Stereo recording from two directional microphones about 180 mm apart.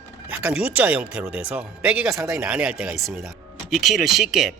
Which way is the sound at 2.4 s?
5° right (ahead or behind).